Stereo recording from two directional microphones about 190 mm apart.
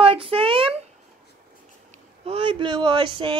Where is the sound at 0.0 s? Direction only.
30° right (ahead or behind).